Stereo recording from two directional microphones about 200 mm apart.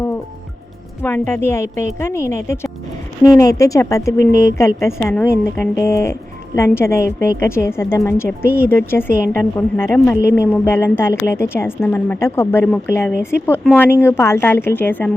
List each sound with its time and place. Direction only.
1.0 s a woman's voice: 10° left (ahead or behind)
8.4 s speech: 10° right (ahead or behind)
8.7 s a woman's voice: 10° left (ahead or behind)